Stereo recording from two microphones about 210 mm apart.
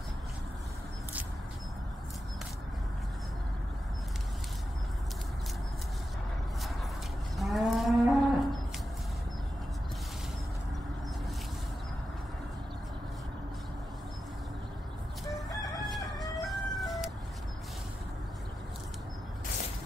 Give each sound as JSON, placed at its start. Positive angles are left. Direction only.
{"t": 7.3, "sound": "moo", "side_deg": 0}
{"t": 15.5, "sound": "crowing", "side_deg": 15}
{"t": 16.2, "sound": "chicken", "side_deg": 0}